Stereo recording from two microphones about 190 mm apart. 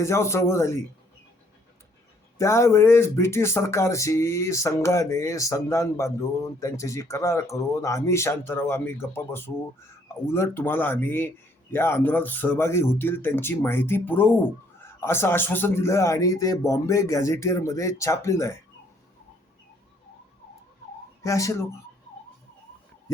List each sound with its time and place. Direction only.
0.0 s speech: 15° left (ahead or behind)
2.4 s speech: 15° left (ahead or behind)
21.2 s speech: 15° left (ahead or behind)